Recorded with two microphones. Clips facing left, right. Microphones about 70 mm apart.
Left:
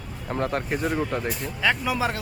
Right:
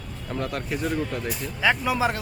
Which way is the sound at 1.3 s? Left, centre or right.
Centre.